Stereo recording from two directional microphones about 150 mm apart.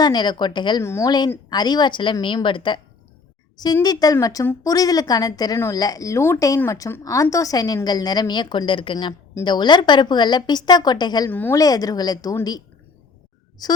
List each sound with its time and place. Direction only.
0.0 s a woman's voice: 30° left (ahead or behind)
0.8 s a woman's voice: 20° left (ahead or behind)
3.8 s a woman's voice: 25° left (ahead or behind)
11.3 s a woman's voice: 15° left (ahead or behind)
11.6 s a woman's voice: 25° left (ahead or behind)